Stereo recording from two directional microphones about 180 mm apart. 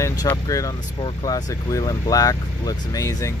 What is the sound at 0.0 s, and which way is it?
Speech, 15° left (ahead or behind).